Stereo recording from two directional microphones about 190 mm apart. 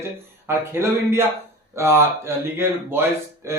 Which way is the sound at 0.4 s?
15° right (ahead or behind).